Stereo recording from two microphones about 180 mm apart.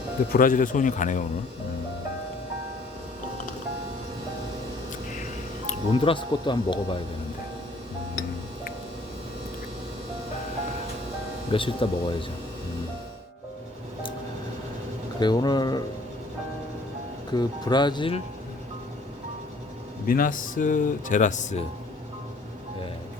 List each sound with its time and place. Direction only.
0.3 s speech: 50° left (ahead or behind)
5.9 s speech: 30° left (ahead or behind)
11.5 s speech: 30° left (ahead or behind)
15.2 s speech: 25° left (ahead or behind)
17.3 s speech: 25° left (ahead or behind)
20.1 s speech: 50° left (ahead or behind)